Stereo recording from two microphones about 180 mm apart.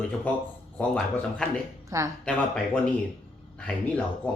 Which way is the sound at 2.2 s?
5° left (ahead or behind).